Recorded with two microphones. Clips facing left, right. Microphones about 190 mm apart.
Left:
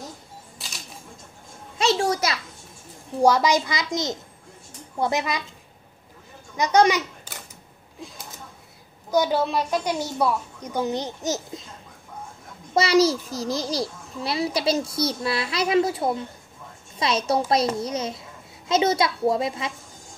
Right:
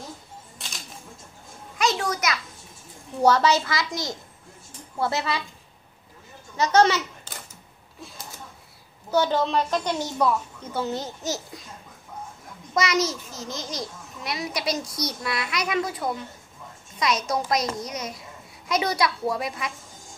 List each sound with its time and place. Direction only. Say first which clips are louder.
1.8 s a sound: left 3 dB; 30° left (ahead or behind)
3.2 s a woman's voice: left 1 dB; 10° left (ahead or behind)
6.5 s speech: left 1 dB; 15° left (ahead or behind)
9.1 s a woman's voice: left 1 dB; 10° left (ahead or behind)
12.7 s a child's voice: left 6 dB; 30° left (ahead or behind)